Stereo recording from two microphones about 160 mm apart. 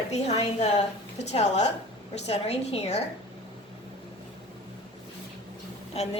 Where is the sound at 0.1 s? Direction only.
45° left (ahead or behind).